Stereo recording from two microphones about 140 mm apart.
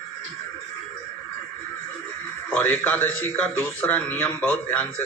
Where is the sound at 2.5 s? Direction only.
10° left (ahead or behind).